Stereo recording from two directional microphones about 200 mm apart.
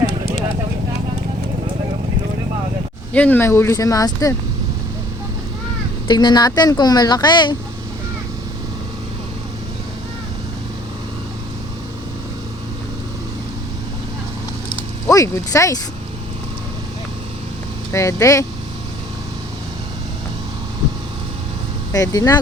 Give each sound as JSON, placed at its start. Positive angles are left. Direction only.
{"t": 3.1, "sound": "speech", "side_deg": 10}
{"t": 6.1, "sound": "speech", "side_deg": 20}
{"t": 15.0, "sound": "speech", "side_deg": 15}
{"t": 17.9, "sound": "speech", "side_deg": 15}
{"t": 21.9, "sound": "speech", "side_deg": 15}